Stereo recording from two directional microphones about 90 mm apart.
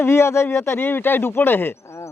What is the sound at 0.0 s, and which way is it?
A man's voice, 30° left (ahead or behind).